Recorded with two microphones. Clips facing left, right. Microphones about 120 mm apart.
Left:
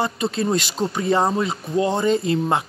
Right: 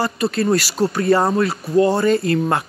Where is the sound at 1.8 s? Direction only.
20° left (ahead or behind).